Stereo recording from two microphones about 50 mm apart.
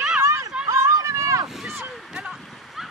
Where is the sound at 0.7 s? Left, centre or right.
Right.